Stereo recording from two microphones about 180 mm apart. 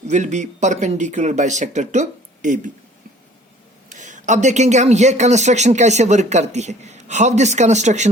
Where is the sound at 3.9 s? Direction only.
45° right (ahead or behind).